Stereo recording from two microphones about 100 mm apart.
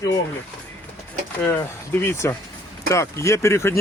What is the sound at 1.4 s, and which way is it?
Speech, 20° left (ahead or behind).